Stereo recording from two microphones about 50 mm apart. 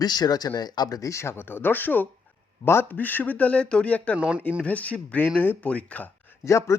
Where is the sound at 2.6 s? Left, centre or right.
Left.